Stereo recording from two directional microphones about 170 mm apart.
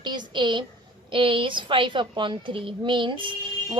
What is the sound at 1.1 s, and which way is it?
A woman's voice, 30° right (ahead or behind).